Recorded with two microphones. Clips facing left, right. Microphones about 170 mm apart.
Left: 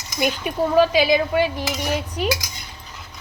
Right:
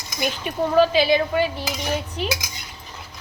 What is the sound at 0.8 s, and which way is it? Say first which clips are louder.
Speech: even; 15° left (ahead or behind).